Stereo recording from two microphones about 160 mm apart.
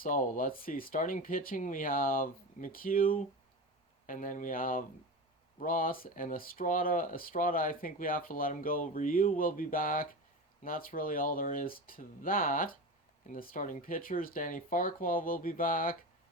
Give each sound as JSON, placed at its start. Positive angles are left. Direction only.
{"t": 0.0, "sound": "speech", "side_deg": 55}